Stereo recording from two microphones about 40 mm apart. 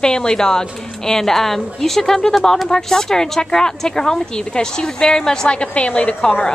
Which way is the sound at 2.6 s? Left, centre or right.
Centre.